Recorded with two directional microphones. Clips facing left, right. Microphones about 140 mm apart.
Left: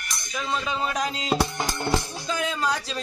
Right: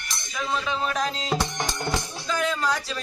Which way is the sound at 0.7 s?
20° left (ahead or behind).